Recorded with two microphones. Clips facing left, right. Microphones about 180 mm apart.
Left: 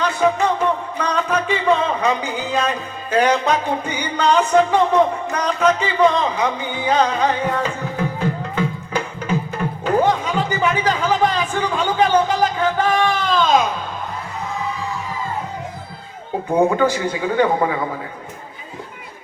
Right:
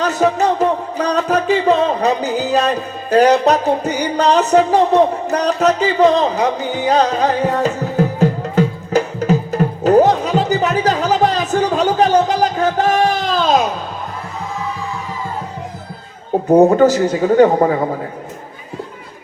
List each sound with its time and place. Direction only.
0.0 s music: 40° right (ahead or behind)
16.5 s speech: 40° right (ahead or behind)